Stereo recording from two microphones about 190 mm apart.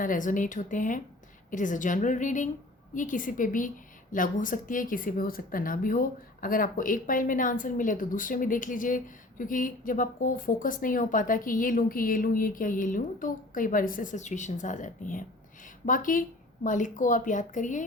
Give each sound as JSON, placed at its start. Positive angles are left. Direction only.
{"t": 0.0, "sound": "a woman's voice", "side_deg": 45}